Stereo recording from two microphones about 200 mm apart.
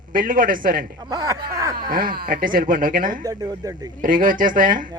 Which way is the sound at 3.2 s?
15° right (ahead or behind).